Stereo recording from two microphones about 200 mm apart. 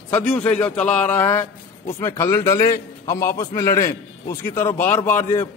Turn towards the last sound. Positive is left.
turn(degrees=10)  # may be behind; listen again after turning